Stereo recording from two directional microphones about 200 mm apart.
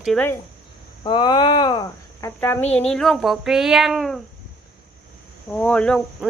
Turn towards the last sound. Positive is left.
turn(degrees=5)  # may be behind; listen again after turning